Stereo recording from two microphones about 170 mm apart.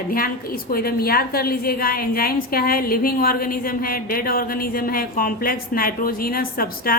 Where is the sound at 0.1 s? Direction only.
60° left (ahead or behind).